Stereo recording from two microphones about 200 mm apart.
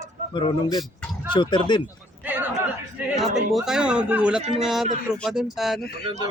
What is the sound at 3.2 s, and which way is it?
Speech, centre (ahead or behind).